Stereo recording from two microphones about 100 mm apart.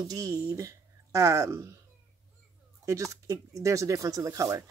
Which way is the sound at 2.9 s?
30° right (ahead or behind).